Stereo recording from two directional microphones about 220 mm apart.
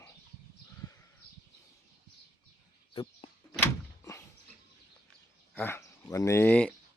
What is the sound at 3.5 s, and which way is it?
Door, 10° left (ahead or behind).